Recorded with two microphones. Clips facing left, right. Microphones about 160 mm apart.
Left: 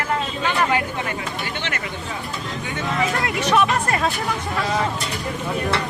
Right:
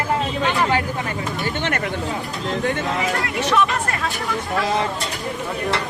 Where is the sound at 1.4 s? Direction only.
50° right (ahead or behind).